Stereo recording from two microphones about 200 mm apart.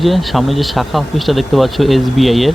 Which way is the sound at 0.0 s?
Centre (ahead or behind).